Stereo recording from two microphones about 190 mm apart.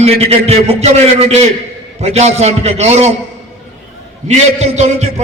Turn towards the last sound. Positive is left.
turn(degrees=-35)  # may be behind; listen again after turning